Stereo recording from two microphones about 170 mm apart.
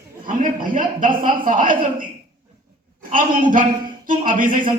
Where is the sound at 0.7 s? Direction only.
50° right (ahead or behind).